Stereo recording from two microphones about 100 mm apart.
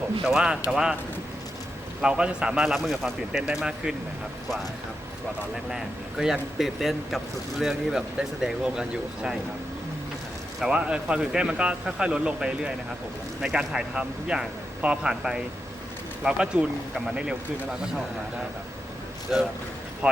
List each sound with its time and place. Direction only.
0.3 s speech: 5° right (ahead or behind)
2.0 s speech: 10° right (ahead or behind)
5.7 s speech: 5° right (ahead or behind)
10.6 s speech: 10° right (ahead or behind)
19.3 s speech: 5° right (ahead or behind)